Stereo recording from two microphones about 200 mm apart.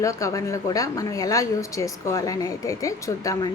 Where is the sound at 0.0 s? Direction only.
15° left (ahead or behind).